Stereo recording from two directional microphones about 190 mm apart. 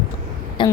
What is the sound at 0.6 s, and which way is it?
Speech, 25° left (ahead or behind).